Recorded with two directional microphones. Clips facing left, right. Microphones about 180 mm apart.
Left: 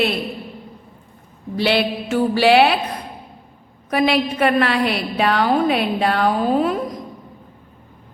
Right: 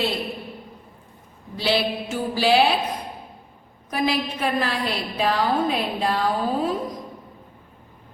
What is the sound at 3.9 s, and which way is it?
A woman's voice, 75° left (ahead or behind).